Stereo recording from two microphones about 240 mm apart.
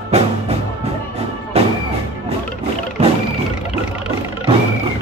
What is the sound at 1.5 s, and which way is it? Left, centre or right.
Music, right.